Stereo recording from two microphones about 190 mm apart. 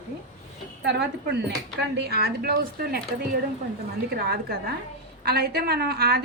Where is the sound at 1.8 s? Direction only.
60° right (ahead or behind).